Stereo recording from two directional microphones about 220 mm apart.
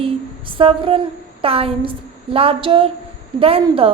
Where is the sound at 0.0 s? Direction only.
25° right (ahead or behind).